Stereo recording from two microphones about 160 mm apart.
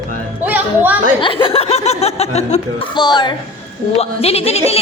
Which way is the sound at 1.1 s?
35° left (ahead or behind).